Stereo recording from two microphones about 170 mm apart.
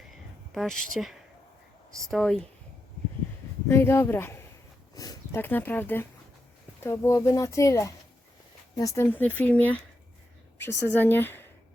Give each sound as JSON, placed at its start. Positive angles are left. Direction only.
{"t": 0.1, "sound": "a sound", "side_deg": 0}
{"t": 2.0, "sound": "speech", "side_deg": 0}
{"t": 3.7, "sound": "speech", "side_deg": 15}
{"t": 10.8, "sound": "speech", "side_deg": 10}